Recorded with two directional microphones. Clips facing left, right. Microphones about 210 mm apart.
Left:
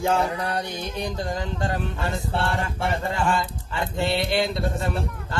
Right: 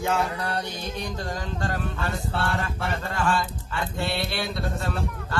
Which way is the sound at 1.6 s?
20° left (ahead or behind).